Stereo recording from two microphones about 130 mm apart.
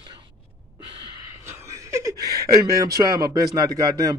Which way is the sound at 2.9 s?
25° right (ahead or behind).